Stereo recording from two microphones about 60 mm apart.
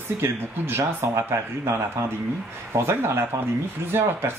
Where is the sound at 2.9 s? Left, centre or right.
Right.